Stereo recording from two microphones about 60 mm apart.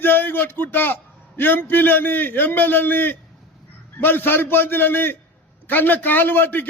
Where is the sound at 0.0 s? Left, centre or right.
Left.